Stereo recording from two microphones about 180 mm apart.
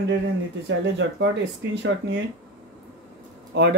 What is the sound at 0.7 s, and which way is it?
Speech, 80° right.